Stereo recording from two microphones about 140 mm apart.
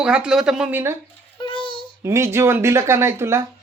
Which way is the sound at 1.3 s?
35° left (ahead or behind).